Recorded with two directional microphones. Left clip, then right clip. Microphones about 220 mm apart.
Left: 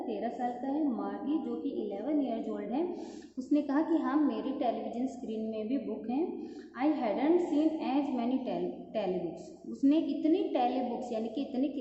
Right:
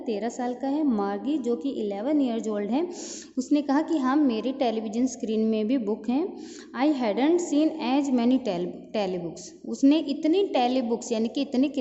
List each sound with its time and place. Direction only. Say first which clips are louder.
0.1 s a woman's voice: right 7 dB; 50° right (ahead or behind)